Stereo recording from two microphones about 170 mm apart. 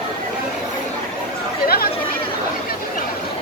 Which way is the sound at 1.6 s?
60° left (ahead or behind).